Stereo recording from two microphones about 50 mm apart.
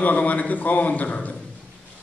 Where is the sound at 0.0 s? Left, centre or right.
Left.